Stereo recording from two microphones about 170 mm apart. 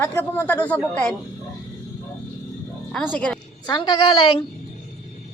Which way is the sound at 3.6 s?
25° left (ahead or behind).